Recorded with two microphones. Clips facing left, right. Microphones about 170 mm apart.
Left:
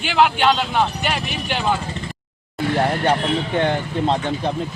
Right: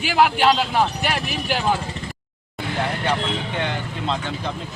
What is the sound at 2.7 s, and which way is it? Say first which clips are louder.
Speech: left 4 dB; 40° left (ahead or behind).